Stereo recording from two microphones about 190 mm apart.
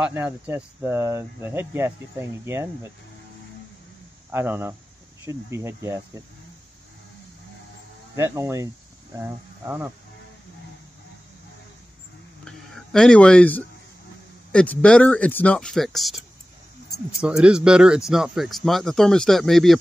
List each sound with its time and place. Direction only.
0.0 s speech: 10° right (ahead or behind)
4.3 s speech: 10° right (ahead or behind)
8.2 s speech: 15° right (ahead or behind)
12.4 s a sound: 5° left (ahead or behind)
14.5 s speech: 5° left (ahead or behind)
17.2 s speech: 5° right (ahead or behind)